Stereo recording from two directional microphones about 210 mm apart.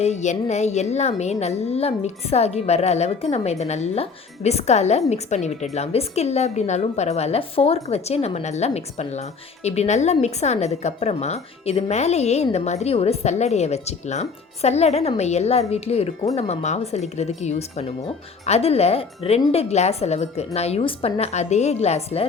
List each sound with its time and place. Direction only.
0.0 s a woman's voice: 35° left (ahead or behind)